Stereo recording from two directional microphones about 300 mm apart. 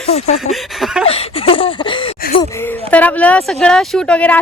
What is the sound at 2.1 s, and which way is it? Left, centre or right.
Gasp, left.